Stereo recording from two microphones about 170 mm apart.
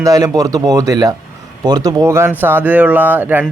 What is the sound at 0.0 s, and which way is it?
Speech, 20° right (ahead or behind).